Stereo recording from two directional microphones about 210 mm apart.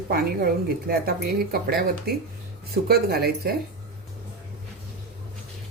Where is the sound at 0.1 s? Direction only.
45° right (ahead or behind).